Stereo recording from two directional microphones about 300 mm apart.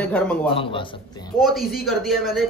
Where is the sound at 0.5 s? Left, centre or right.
Centre.